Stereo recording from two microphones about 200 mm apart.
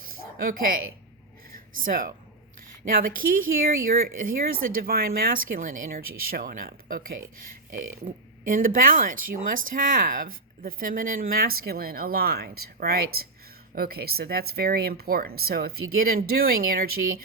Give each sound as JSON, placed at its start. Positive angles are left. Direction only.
{"t": 0.3, "sound": "speech", "side_deg": -45}
{"t": 1.8, "sound": "speech", "side_deg": -45}
{"t": 3.2, "sound": "speech", "side_deg": -45}